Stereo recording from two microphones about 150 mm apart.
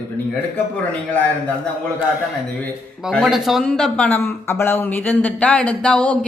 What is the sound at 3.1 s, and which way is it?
Speech, centre (ahead or behind).